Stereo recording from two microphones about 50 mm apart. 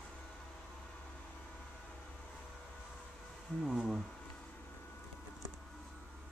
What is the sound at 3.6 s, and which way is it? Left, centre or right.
Speech, centre.